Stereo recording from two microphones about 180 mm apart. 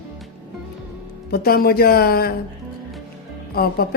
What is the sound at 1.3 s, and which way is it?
A woman's voice, 55° left (ahead or behind).